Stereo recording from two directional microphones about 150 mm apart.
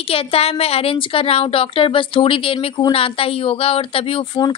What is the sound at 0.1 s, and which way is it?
A woman's voice, 40° left (ahead or behind).